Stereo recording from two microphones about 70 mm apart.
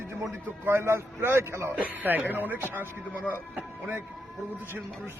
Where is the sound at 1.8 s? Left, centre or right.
Right.